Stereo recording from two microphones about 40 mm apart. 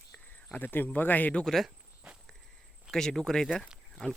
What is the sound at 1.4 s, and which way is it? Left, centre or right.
Speech, centre.